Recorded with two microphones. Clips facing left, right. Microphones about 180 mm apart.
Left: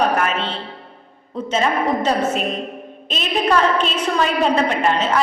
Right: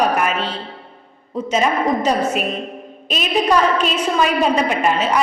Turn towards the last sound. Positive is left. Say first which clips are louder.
# right 1 dB
turn(degrees=-10)  # may be behind; listen again after turning